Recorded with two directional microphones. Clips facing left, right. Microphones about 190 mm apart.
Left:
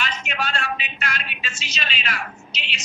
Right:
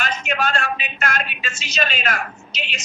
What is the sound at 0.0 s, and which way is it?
Speech, 45° right (ahead or behind).